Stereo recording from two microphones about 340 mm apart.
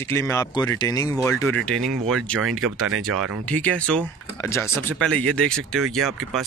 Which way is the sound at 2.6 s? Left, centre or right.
Right.